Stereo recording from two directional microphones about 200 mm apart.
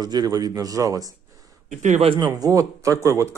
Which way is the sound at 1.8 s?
35° right (ahead or behind).